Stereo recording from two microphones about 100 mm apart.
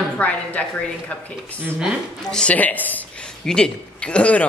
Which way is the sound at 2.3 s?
10° left (ahead or behind).